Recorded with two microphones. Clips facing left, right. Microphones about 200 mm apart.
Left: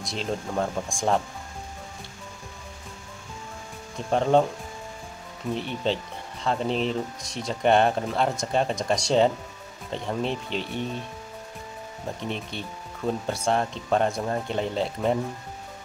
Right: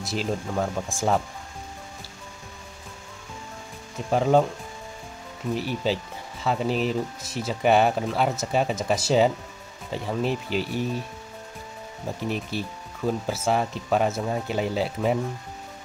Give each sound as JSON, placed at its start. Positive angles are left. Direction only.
{"t": 0.0, "sound": "speech", "side_deg": -5}
{"t": 4.1, "sound": "speech", "side_deg": -5}
{"t": 5.5, "sound": "speech", "side_deg": -5}
{"t": 12.2, "sound": "speech", "side_deg": -5}